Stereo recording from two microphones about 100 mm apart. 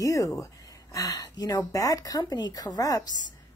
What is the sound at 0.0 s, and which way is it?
A woman's voice, 35° left (ahead or behind).